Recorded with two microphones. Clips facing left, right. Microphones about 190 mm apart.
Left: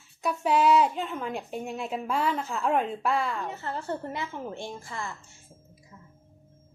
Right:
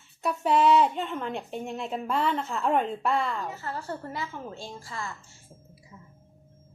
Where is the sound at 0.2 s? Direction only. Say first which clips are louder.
Right 1 dB; centre (ahead or behind).